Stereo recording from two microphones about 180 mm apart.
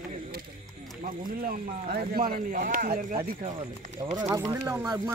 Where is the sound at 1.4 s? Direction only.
55° right (ahead or behind).